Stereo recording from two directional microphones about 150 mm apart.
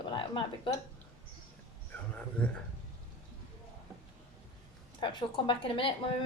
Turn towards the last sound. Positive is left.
turn(degrees=35)  # may be behind; listen again after turning